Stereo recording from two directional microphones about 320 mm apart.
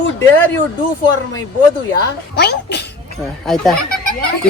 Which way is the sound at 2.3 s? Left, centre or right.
Left.